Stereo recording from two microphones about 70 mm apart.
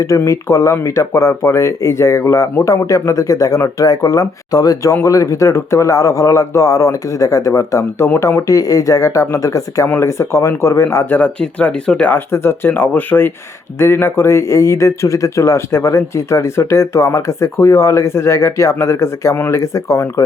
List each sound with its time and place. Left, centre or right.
0.3 s speech: left
8.4 s speech: left
11.0 s speech: left
11.3 s speech: centre
12.1 s speech: left